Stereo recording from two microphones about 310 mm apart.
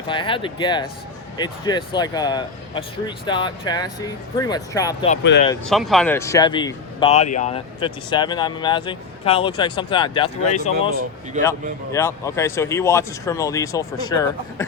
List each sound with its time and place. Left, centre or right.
0.1 s a man's voice: centre
5.1 s speech: left
5.6 s a man's voice: centre; by 10.7 s left
11.9 s a man's voice: centre